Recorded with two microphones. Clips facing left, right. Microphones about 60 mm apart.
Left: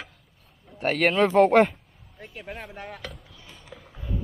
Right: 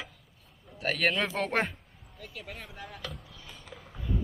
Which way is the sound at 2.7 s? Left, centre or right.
Left.